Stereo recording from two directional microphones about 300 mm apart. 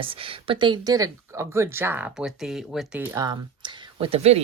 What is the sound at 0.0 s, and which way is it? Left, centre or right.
Speech, centre.